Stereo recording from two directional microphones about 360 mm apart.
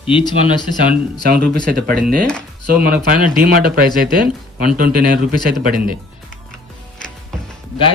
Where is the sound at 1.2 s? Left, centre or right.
Right.